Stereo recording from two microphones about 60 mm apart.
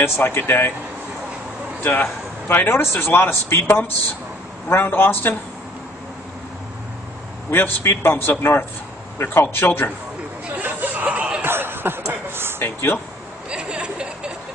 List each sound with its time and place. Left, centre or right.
0.0 s a man's voice: left
1.8 s a man's voice: left
7.5 s a man's voice: left
10.6 s hubbub: right
11.1 s a sound: right
11.4 s a sound: right
12.5 s speech: left
13.5 s chuckle: centre